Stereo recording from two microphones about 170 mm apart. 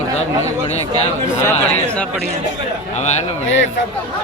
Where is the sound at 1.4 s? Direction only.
10° left (ahead or behind).